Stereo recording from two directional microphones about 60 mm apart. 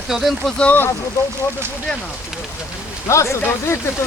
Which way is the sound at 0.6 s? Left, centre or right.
Left.